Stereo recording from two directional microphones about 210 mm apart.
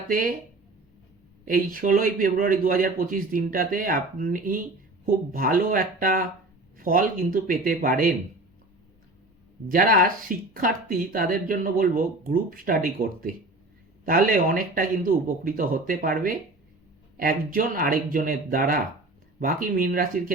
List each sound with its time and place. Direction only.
0.1 s a man's voice: 40° right (ahead or behind)
1.5 s a man's voice: 40° right (ahead or behind)
9.6 s speech: 40° right (ahead or behind)